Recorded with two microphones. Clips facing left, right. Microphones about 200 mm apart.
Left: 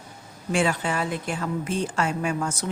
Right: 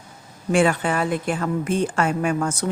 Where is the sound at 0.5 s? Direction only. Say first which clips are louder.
Right 5 dB; 55° right (ahead or behind).